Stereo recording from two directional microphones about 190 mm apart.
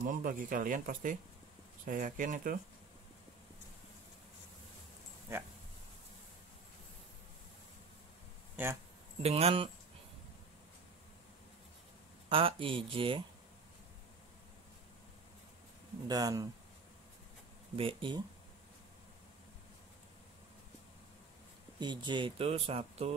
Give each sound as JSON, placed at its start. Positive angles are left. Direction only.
{"t": 0.0, "sound": "speech", "side_deg": -45}
{"t": 5.3, "sound": "speech", "side_deg": -15}
{"t": 8.6, "sound": "speech", "side_deg": -10}
{"t": 9.2, "sound": "speech", "side_deg": -30}
{"t": 12.3, "sound": "speech", "side_deg": -30}
{"t": 16.1, "sound": "speech", "side_deg": -20}
{"t": 17.7, "sound": "speech", "side_deg": -25}
{"t": 21.7, "sound": "speech", "side_deg": -25}